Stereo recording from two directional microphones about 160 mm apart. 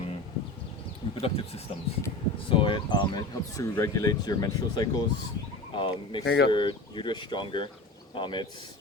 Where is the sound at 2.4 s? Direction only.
30° left (ahead or behind).